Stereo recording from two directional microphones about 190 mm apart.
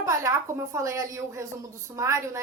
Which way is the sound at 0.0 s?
15° right (ahead or behind).